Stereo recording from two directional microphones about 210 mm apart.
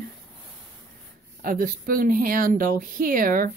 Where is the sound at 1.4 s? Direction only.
45° right (ahead or behind).